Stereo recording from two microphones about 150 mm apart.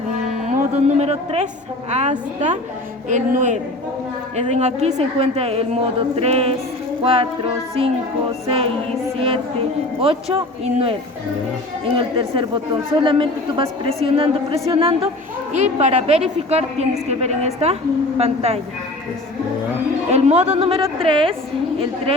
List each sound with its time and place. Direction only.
0.4 s a woman's voice: 50° right (ahead or behind)
11.9 s a woman's voice: 35° right (ahead or behind)
15.5 s a woman's voice: 50° right (ahead or behind)
20.1 s a woman's voice: 45° right (ahead or behind)